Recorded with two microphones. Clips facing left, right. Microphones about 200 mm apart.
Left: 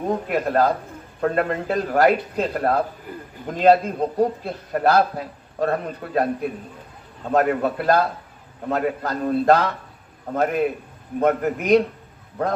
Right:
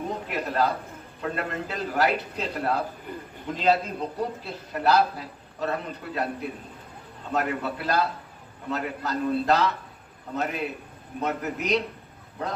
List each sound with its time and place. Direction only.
0.1 s a man's voice: 50° left (ahead or behind)
7.3 s a man's voice: 50° left (ahead or behind)